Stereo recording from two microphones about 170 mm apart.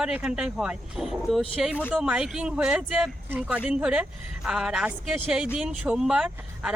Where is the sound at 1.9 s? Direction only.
5° right (ahead or behind).